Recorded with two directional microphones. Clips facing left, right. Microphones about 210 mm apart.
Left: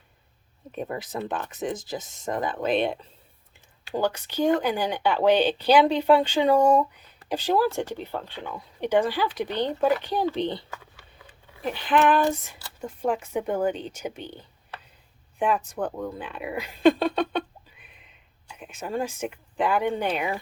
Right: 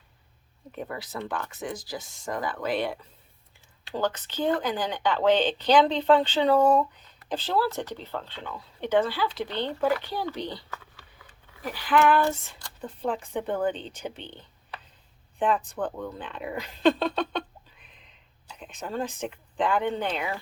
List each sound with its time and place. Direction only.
0.7 s speech: 20° left (ahead or behind)
3.9 s a woman's voice: 10° left (ahead or behind)